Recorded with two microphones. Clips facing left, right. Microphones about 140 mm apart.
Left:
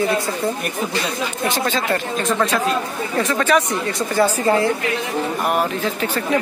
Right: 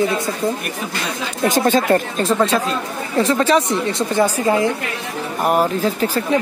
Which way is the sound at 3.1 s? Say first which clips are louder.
Right 3 dB; 25° right (ahead or behind).